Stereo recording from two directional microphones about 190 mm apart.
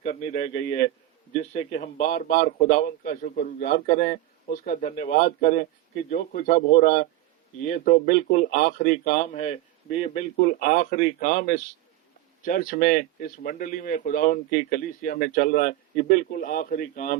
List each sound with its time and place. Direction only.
0.0 s a man's voice: 35° left (ahead or behind)
9.1 s speech: 35° left (ahead or behind)